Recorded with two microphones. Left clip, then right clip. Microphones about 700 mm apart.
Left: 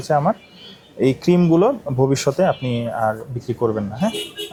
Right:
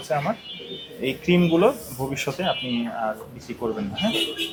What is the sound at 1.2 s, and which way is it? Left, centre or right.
Speech, left.